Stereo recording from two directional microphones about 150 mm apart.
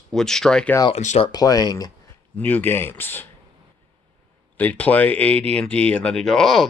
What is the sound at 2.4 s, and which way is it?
Speech, 10° left (ahead or behind).